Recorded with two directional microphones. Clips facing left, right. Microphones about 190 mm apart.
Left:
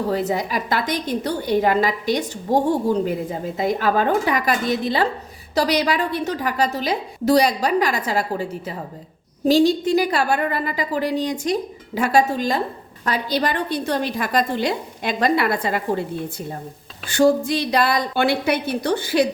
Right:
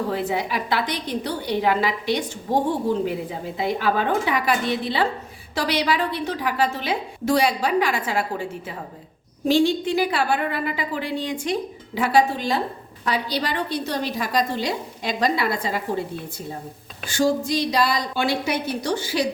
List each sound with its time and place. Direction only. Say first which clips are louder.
0.1 s a woman's voice: left 3 dB; 40° left (ahead or behind)
3.6 s a woman's voice: left 3 dB; 45° left (ahead or behind)
17.1 s a woman's voice: left 4 dB; 60° left (ahead or behind)